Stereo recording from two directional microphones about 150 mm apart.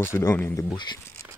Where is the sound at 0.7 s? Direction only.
30° left (ahead or behind).